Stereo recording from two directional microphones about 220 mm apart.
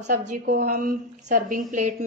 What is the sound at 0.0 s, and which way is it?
A woman's voice, 35° right (ahead or behind).